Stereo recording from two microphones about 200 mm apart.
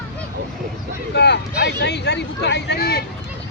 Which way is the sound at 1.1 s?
55° left (ahead or behind).